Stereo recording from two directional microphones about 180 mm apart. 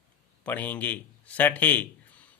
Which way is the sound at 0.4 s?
10° left (ahead or behind).